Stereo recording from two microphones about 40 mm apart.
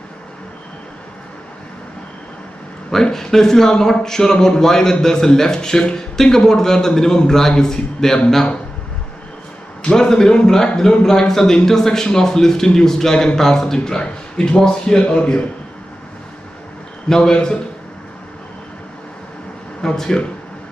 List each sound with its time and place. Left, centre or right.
2.9 s a man's voice: centre
9.8 s a man's voice: centre
17.1 s a man's voice: centre
19.8 s a man's voice: centre